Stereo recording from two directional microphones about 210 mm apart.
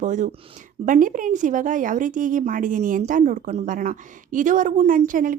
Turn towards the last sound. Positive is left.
turn(degrees=-40)  # may be behind; listen again after turning